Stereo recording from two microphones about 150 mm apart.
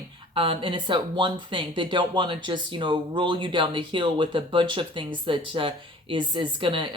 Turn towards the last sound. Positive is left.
turn(degrees=-35)  # may be behind; listen again after turning